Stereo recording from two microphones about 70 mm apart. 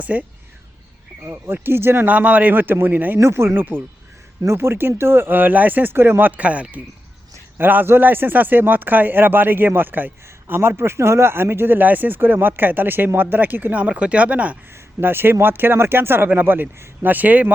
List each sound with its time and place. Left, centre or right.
0.0 s speech: right
1.2 s speech: right
2.0 s speech: right
3.2 s speech: right; by 14.6 s centre
15.0 s speech: right